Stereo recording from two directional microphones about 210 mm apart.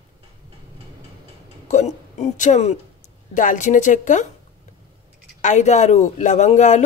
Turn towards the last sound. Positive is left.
turn(degrees=35)  # may be behind; listen again after turning